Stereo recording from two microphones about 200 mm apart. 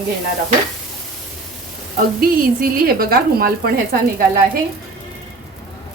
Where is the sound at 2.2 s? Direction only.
50° right (ahead or behind).